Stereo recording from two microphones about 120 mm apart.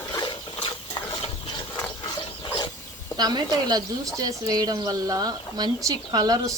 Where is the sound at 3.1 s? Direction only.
35° right (ahead or behind).